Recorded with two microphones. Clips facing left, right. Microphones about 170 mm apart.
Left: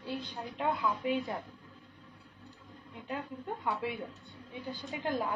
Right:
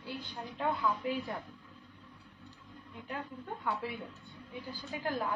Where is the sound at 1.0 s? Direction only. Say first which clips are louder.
Left 3 dB; 20° left (ahead or behind).